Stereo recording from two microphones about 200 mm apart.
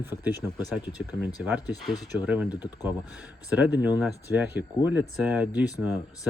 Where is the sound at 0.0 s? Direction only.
10° right (ahead or behind).